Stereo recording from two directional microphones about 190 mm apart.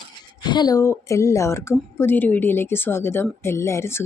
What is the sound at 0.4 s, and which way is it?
Speech, 20° left (ahead or behind).